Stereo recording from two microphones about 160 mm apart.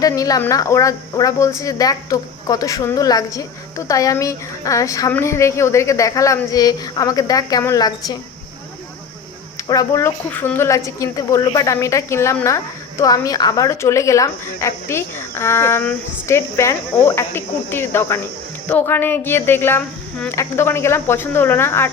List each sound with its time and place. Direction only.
0.0 s a woman's voice: 20° left (ahead or behind)
9.6 s a woman's voice: 20° left (ahead or behind)